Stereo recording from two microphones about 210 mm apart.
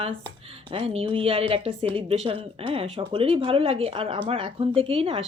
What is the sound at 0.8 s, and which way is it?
Speech, 30° right (ahead or behind).